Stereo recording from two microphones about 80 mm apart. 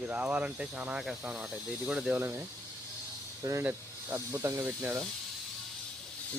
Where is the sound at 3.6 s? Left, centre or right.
Right.